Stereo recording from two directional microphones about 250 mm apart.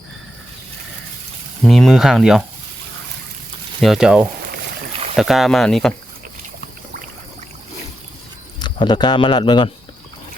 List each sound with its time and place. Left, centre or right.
1.6 s speech: centre
3.8 s speech: centre
8.6 s speech: centre